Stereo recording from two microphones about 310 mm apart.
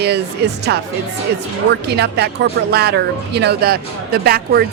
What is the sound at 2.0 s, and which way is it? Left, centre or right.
A woman's voice, right.